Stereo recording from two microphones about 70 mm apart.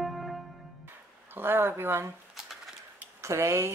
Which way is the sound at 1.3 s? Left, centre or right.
Right.